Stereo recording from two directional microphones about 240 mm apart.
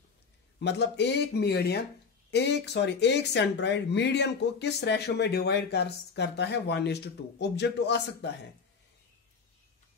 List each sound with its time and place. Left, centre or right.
0.6 s speech: left